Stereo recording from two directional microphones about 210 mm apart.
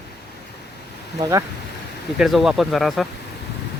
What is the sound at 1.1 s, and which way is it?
Speech, 15° right (ahead or behind).